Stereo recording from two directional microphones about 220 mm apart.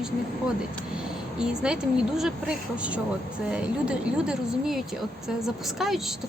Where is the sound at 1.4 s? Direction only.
5° right (ahead or behind).